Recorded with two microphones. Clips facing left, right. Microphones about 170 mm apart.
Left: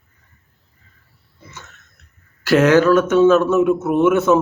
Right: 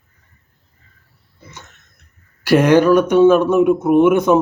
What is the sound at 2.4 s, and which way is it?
Speech, 15° right (ahead or behind).